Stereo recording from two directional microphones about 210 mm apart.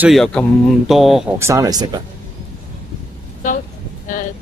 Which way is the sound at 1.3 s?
15° right (ahead or behind).